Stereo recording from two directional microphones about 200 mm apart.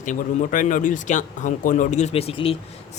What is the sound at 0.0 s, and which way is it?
Speech, 40° left (ahead or behind).